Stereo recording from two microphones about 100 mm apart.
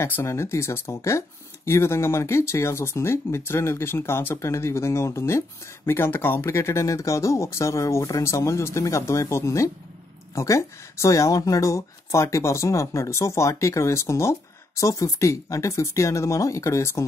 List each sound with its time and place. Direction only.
0.0 s speech: 25° left (ahead or behind)